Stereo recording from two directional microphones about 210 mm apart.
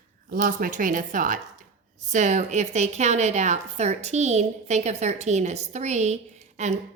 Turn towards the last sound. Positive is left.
turn(degrees=-35)  # may be behind; listen again after turning